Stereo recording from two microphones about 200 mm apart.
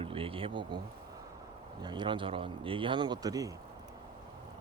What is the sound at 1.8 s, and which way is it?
Speech, 20° right (ahead or behind).